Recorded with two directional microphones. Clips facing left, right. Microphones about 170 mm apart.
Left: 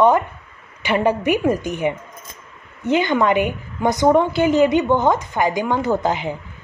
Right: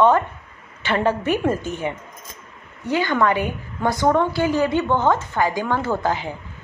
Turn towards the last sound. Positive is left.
turn(degrees=20)  # may be behind; listen again after turning